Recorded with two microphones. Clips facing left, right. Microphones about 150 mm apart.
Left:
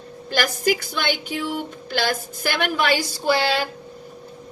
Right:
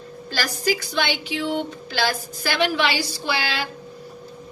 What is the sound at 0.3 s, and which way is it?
A woman's voice, 55° left (ahead or behind).